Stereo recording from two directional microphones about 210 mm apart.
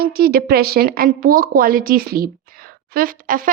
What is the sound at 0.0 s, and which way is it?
Speech, 45° right (ahead or behind).